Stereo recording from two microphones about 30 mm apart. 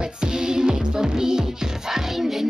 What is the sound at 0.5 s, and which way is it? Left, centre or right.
Music, right.